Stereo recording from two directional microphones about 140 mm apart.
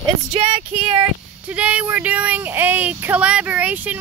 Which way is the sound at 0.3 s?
45° right (ahead or behind).